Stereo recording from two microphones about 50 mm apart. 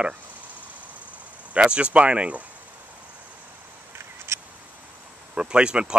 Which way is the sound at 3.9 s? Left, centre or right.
Right.